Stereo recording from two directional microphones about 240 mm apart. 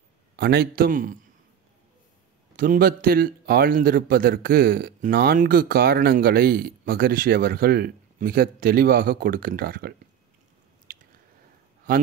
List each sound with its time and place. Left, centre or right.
0.4 s speech: right
2.5 s speech: right